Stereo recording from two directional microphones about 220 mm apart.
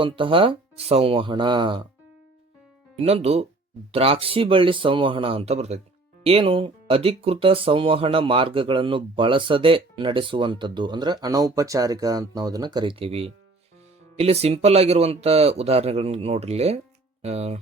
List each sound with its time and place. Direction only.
0.0 s speech: 25° right (ahead or behind)
2.9 s speech: 30° right (ahead or behind)